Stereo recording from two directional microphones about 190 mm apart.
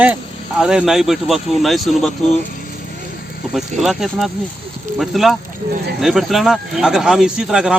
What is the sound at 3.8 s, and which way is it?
Speech, centre (ahead or behind).